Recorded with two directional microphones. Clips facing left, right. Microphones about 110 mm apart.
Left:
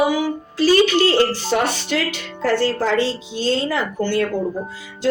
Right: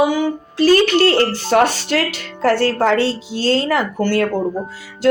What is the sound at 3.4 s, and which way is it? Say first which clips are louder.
Speech: right 4 dB; 75° right (ahead or behind).